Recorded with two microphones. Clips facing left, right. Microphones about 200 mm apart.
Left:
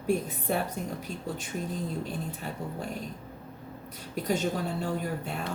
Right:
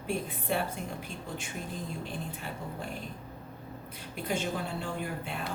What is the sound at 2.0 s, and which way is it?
Speech, 40° left (ahead or behind).